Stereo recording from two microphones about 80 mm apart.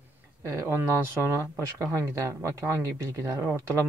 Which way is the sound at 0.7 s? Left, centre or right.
Right.